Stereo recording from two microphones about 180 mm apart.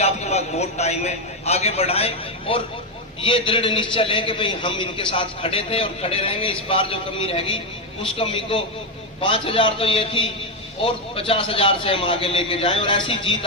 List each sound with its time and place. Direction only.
0.0 s a man's voice: 35° left (ahead or behind)